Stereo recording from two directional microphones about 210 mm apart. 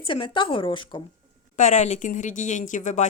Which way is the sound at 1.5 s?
35° left (ahead or behind).